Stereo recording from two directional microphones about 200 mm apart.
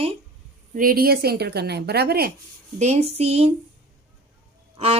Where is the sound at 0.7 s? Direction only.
45° right (ahead or behind).